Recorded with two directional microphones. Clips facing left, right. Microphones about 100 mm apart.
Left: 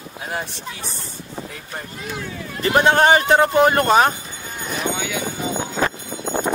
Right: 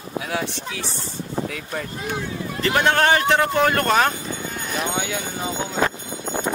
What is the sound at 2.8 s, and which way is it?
Speech, 20° left (ahead or behind).